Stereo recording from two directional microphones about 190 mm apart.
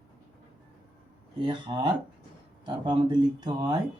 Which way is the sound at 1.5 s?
25° right (ahead or behind).